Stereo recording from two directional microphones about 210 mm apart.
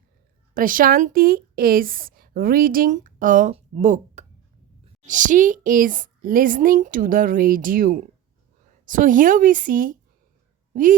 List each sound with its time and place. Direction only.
0.5 s a woman's voice: 40° right (ahead or behind)